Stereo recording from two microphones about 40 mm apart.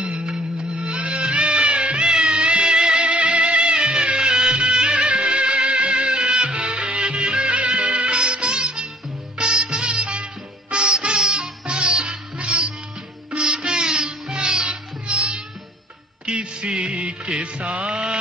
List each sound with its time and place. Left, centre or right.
0.0 s music of bollywood: right
9.4 s music: right